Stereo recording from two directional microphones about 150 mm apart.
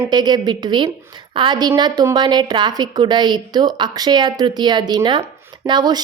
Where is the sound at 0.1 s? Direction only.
25° right (ahead or behind).